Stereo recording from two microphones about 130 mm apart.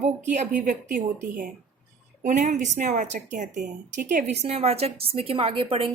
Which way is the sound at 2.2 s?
75° right (ahead or behind).